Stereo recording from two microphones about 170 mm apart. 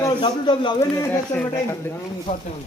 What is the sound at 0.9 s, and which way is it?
Speech, 10° left (ahead or behind).